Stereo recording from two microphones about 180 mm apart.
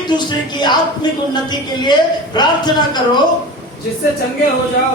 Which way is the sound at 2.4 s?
25° left (ahead or behind).